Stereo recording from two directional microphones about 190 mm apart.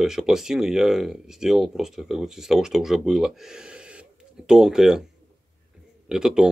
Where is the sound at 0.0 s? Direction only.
Centre (ahead or behind).